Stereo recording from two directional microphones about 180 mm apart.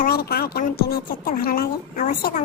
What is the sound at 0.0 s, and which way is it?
A woman's voice, 60° left (ahead or behind).